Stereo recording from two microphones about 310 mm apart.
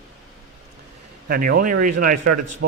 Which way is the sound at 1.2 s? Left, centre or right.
Right.